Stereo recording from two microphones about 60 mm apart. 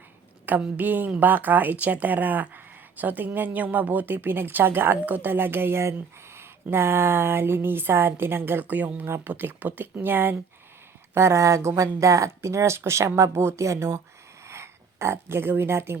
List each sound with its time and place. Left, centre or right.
0.8 s a woman's voice: right
9.0 s speech: right
9.3 s a woman's voice: right
11.1 s speech: right
13.4 s speech: right